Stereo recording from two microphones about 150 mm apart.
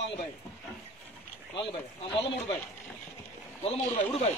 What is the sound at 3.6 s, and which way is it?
Speech, 45° left (ahead or behind).